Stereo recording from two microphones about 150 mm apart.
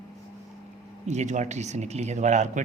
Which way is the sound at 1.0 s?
50° right (ahead or behind).